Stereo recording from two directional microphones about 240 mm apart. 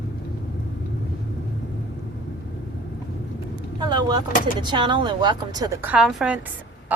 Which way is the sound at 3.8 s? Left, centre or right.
Centre.